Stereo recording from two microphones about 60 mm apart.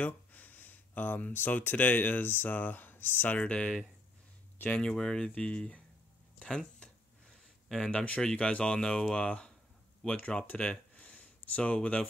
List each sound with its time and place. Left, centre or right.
0.0 s speech: left
4.7 s speech: centre
7.6 s speech: centre
7.9 s speech: left
10.4 s a sound: left